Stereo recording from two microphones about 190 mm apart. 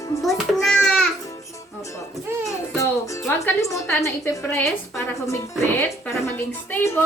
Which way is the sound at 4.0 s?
15° left (ahead or behind).